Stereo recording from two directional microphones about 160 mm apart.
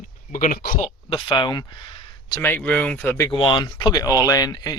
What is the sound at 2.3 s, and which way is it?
Speech, 15° left (ahead or behind).